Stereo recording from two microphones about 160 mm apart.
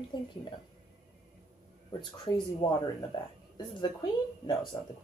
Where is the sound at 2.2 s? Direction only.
25° left (ahead or behind).